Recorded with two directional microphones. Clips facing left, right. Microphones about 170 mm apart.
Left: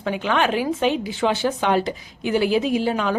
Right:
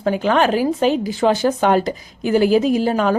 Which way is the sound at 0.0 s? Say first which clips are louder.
Right 5 dB; 40° right (ahead or behind).